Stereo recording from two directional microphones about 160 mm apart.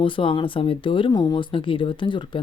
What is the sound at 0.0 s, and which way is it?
Speech, 30° left (ahead or behind).